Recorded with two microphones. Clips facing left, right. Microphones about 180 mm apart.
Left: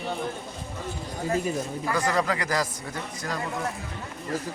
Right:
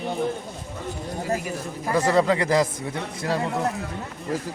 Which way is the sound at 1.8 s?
25° right (ahead or behind).